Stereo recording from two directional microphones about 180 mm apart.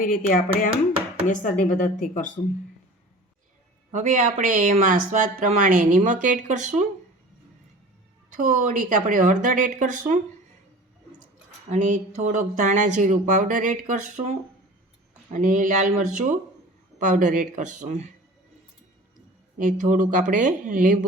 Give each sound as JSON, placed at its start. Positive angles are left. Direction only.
{"t": 0.0, "sound": "speech", "side_deg": 50}
{"t": 3.9, "sound": "speech", "side_deg": -45}
{"t": 8.4, "sound": "speech", "side_deg": -50}
{"t": 11.7, "sound": "speech", "side_deg": -45}
{"t": 19.5, "sound": "speech", "side_deg": -45}